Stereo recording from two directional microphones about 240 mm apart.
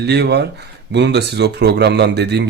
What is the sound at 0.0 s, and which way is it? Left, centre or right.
Speech, right.